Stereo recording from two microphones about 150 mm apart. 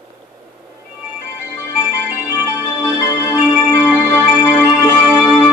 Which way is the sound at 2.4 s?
15° left (ahead or behind).